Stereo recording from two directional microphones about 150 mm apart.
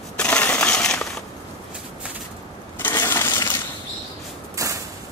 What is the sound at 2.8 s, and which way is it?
Coin, 15° left (ahead or behind).